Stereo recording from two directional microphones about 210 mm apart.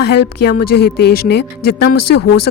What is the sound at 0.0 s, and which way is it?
A woman's voice, 50° left (ahead or behind).